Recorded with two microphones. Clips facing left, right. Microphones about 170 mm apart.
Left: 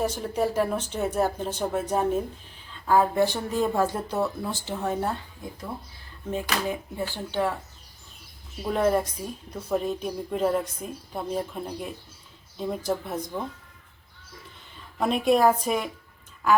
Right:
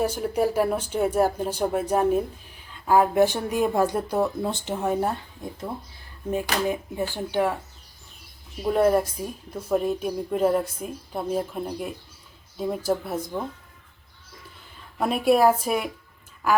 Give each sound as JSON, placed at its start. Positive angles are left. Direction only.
{"t": 0.0, "sound": "speech", "side_deg": -10}
{"t": 6.7, "sound": "speech", "side_deg": -15}
{"t": 8.7, "sound": "speech", "side_deg": -5}
{"t": 14.9, "sound": "speech", "side_deg": -5}